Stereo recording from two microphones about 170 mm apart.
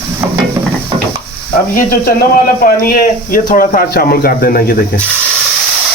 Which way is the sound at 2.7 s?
60° left (ahead or behind).